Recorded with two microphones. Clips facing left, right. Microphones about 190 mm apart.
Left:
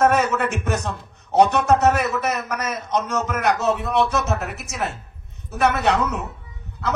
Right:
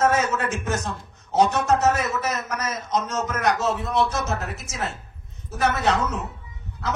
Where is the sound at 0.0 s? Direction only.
65° left (ahead or behind).